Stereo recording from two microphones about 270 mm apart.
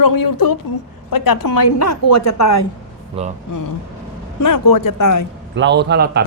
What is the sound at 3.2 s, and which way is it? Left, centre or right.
Speech, right.